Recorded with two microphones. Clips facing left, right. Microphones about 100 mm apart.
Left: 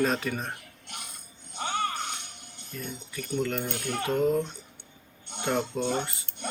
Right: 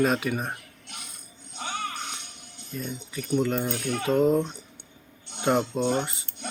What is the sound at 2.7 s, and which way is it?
Speech, 20° right (ahead or behind).